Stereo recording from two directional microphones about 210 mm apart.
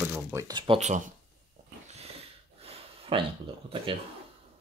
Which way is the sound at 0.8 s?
35° right (ahead or behind).